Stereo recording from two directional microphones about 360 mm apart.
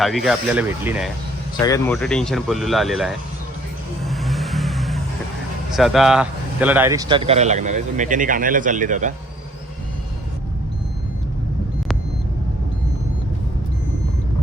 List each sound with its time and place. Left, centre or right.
0.0 s speech: centre
1.5 s speech: centre
4.0 s vehicle: centre
5.7 s speech: centre; by 9.1 s right